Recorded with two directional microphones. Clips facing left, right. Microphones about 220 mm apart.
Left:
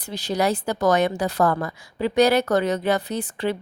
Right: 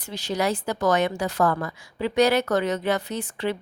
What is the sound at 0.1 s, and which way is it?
A woman's voice, 35° left (ahead or behind).